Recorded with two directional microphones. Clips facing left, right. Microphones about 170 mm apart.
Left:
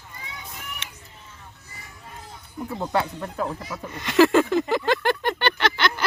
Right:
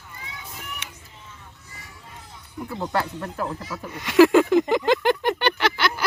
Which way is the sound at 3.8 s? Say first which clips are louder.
Right 3 dB; 10° right (ahead or behind).